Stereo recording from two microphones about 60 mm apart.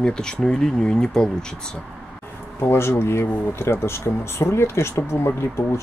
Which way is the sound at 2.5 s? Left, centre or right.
Left.